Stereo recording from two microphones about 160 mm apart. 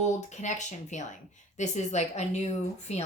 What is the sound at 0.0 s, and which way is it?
A woman's voice, 50° left (ahead or behind).